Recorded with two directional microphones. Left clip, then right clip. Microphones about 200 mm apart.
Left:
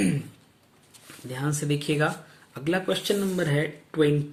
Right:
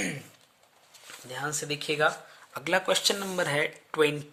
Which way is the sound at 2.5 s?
45° right (ahead or behind).